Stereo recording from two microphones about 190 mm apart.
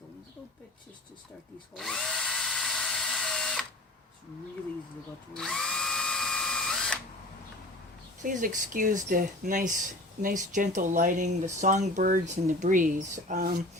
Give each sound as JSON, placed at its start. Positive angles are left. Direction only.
{"t": 1.7, "sound": "drill", "side_deg": 0}
{"t": 5.3, "sound": "drill", "side_deg": 5}
{"t": 8.2, "sound": "speech", "side_deg": -45}